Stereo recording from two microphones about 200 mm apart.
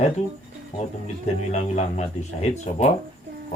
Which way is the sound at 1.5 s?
35° left (ahead or behind).